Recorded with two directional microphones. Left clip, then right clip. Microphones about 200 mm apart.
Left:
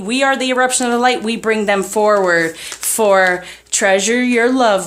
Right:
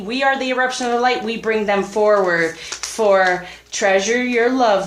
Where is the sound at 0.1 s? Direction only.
45° left (ahead or behind).